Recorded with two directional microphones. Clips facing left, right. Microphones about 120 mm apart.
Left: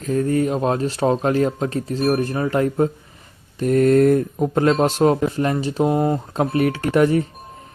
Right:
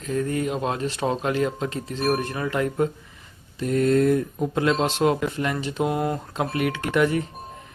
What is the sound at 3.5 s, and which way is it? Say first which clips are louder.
Speech: left 5 dB; 50° left (ahead or behind).